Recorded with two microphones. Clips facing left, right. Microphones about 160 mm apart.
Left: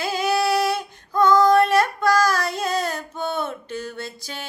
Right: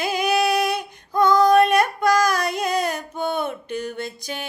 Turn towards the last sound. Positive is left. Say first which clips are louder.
# right 3 dB
turn(degrees=-15)  # may be behind; listen again after turning